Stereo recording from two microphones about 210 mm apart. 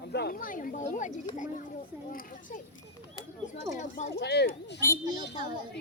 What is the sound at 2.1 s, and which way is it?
Speech, 40° left (ahead or behind).